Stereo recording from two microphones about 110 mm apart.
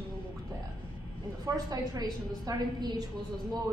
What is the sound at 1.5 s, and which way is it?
A woman's voice, 35° right (ahead or behind).